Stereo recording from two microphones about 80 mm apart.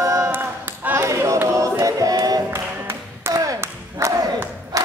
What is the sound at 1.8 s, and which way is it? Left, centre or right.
Music, right.